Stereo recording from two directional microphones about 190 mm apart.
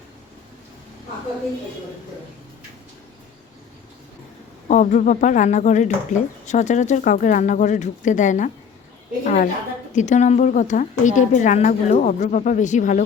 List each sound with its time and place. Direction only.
4.7 s a woman's voice: 40° left (ahead or behind)